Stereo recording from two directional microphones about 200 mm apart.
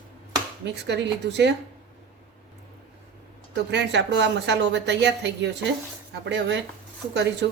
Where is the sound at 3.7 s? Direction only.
60° right (ahead or behind).